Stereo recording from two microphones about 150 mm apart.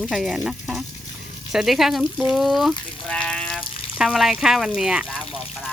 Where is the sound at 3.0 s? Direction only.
5° left (ahead or behind).